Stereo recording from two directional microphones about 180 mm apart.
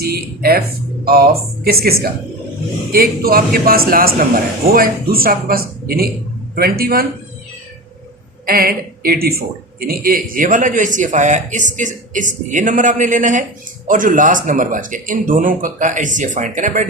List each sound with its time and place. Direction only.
0.0 s a man's voice: 60° right (ahead or behind)
1.6 s a man's voice: 55° right (ahead or behind)
8.4 s a man's voice: 55° right (ahead or behind)